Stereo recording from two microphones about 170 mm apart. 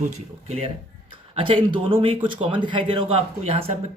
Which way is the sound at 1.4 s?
30° right (ahead or behind).